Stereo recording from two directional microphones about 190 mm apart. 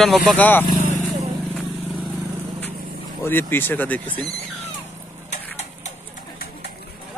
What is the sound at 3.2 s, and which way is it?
Speech, 10° left (ahead or behind).